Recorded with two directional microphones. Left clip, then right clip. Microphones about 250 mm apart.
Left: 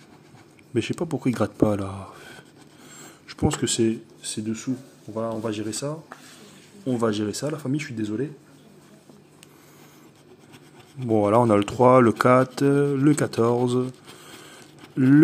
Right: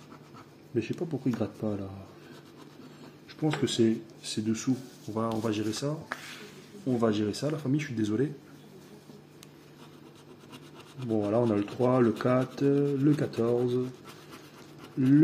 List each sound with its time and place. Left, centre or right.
0.7 s speech: left
3.3 s speech: left
8.0 s speech: centre
11.2 s speech: left
15.0 s speech: left